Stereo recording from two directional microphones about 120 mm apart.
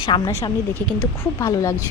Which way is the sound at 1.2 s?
25° left (ahead or behind).